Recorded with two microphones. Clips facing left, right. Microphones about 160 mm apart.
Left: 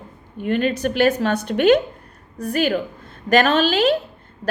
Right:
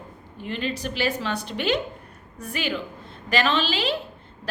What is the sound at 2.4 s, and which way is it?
A woman's voice, 40° left (ahead or behind).